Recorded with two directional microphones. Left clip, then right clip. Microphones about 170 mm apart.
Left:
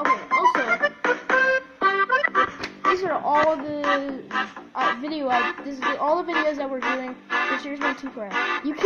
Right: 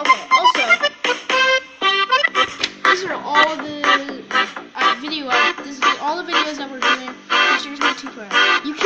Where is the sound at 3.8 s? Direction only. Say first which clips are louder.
Right 6 dB; 15° right (ahead or behind).